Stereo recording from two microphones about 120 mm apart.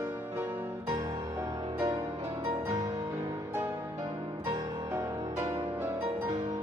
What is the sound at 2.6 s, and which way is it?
Music, 30° right (ahead or behind).